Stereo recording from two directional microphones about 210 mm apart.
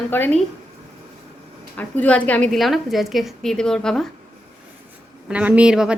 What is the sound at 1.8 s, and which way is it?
A woman's voice, 5° left (ahead or behind).